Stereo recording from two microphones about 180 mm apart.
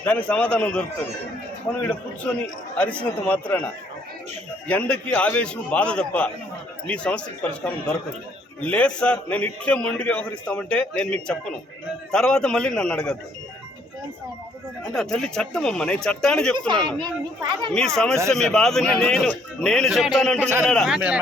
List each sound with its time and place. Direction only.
0.0 s a man's voice: 10° left (ahead or behind)
1.8 s a man's voice: 5° left (ahead or behind)
4.7 s a man's voice: 5° left (ahead or behind)
14.9 s speech: 5° left (ahead or behind)
17.0 s a child's voice: 25° right (ahead or behind)
17.7 s speech: 5° left (ahead or behind)